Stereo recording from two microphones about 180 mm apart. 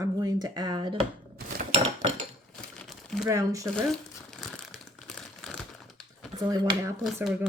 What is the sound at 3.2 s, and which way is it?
Speech, 20° right (ahead or behind).